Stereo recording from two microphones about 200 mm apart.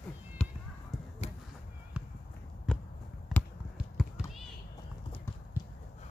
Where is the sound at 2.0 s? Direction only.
5° right (ahead or behind).